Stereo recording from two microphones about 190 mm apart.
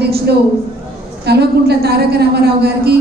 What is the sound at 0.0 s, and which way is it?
A woman's voice, 60° right (ahead or behind).